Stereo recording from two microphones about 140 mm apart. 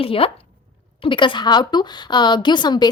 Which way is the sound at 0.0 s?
40° left (ahead or behind).